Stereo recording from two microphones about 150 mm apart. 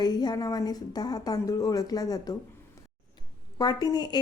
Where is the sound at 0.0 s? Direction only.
30° left (ahead or behind).